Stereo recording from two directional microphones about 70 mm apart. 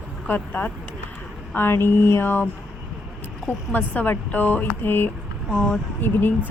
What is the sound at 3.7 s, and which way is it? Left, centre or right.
A woman's voice, left.